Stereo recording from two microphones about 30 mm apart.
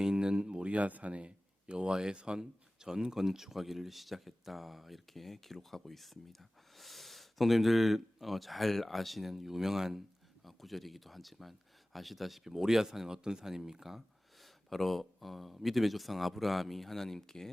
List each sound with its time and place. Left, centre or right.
0.0 s a sound: right
0.6 s speech: right
0.9 s speech: right
1.1 s a sound: right
1.9 s speech: right
10.4 s speech: centre
12.5 s speech: centre
14.4 s speech: centre